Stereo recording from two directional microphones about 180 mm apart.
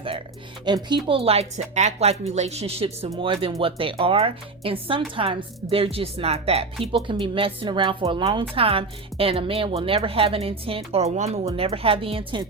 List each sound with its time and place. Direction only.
0.6 s a woman's voice: 25° right (ahead or behind)